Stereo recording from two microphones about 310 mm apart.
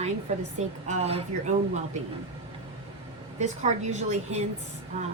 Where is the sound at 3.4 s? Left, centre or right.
Right.